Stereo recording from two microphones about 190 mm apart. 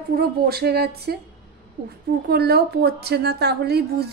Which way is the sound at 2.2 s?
55° right (ahead or behind).